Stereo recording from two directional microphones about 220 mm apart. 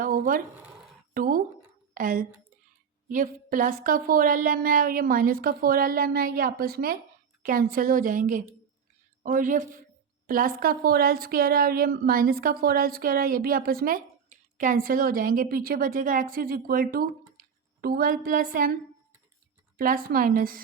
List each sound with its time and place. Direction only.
0.0 s a woman's voice: 40° right (ahead or behind)
19.7 s a woman's voice: 40° right (ahead or behind)